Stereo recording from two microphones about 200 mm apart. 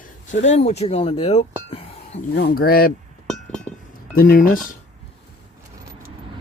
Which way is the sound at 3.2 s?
5° left (ahead or behind).